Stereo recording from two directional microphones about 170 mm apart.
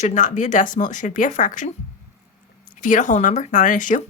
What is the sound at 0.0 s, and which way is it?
A woman's voice, 45° left (ahead or behind).